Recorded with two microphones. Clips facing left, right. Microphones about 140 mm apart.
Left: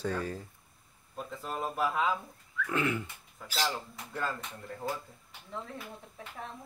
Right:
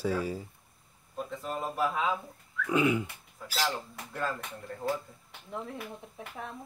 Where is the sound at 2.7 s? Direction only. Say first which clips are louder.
Right 5 dB; 15° right (ahead or behind).